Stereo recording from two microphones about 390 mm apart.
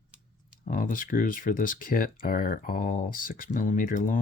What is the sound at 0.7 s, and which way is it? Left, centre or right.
Speech, left.